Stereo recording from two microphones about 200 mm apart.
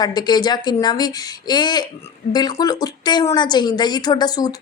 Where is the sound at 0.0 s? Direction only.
20° left (ahead or behind).